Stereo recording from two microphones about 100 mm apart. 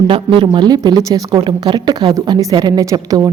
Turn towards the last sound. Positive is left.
turn(degrees=-40)  # may be behind; listen again after turning